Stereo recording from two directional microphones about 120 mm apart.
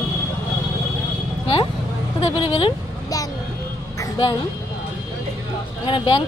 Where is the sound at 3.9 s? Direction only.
25° left (ahead or behind).